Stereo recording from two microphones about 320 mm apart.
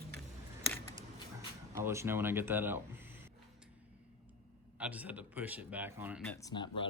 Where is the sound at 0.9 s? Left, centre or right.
Centre.